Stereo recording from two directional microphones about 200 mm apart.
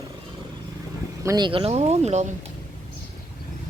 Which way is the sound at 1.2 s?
20° right (ahead or behind).